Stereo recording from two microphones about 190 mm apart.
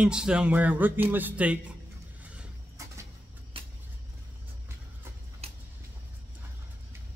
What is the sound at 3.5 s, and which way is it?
Vehicle, 30° right (ahead or behind).